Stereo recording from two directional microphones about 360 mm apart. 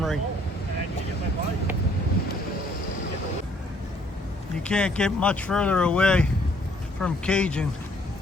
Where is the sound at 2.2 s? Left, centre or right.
Left.